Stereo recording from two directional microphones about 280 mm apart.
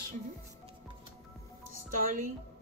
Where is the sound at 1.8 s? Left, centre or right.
Right.